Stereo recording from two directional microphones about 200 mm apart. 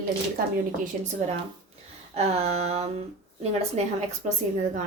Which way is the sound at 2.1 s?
30° right (ahead or behind).